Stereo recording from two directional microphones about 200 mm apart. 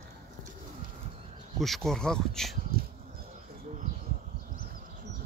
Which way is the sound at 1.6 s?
Centre (ahead or behind).